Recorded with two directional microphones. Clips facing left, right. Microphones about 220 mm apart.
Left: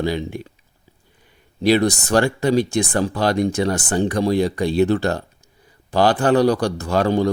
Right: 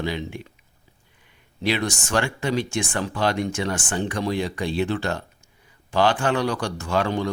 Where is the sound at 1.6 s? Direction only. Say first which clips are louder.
Left 8 dB; 40° left (ahead or behind).